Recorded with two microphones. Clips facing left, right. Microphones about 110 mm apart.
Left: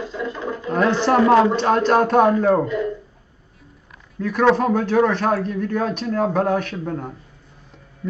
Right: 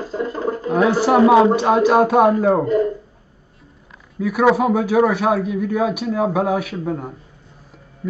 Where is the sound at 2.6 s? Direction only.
40° right (ahead or behind).